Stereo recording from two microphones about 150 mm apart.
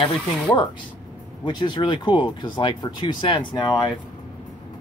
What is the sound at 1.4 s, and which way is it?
Speech, 30° left (ahead or behind).